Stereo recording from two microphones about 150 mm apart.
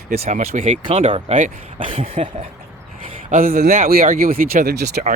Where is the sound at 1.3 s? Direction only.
45° right (ahead or behind).